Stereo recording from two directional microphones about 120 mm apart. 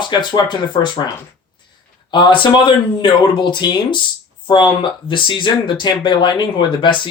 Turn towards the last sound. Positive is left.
turn(degrees=40)  # may be behind; listen again after turning